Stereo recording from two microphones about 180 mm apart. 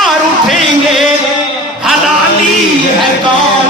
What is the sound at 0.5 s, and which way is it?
Music, centre (ahead or behind).